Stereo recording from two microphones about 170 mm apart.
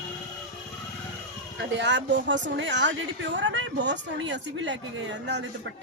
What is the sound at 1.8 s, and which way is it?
A woman's voice, 90° right.